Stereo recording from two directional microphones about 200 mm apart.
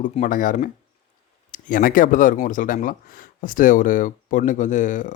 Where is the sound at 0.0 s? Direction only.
40° left (ahead or behind).